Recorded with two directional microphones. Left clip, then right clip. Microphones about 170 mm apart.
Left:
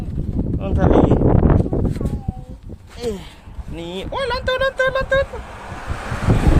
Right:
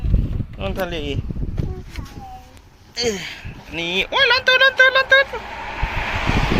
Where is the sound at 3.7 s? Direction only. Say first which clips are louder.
Right 7 dB; 15° left (ahead or behind).